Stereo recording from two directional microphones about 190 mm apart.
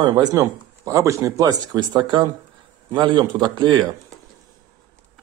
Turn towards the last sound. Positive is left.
turn(degrees=-25)  # may be behind; listen again after turning